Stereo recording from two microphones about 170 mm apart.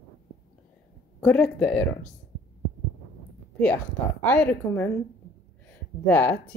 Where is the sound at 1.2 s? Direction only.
5° left (ahead or behind).